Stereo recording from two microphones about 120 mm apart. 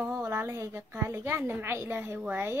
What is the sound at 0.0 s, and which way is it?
A woman's voice, 20° right (ahead or behind).